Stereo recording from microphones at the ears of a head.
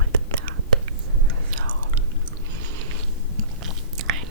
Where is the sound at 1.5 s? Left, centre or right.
Right.